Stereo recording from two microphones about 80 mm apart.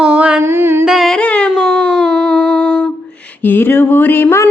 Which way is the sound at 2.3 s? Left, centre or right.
Centre.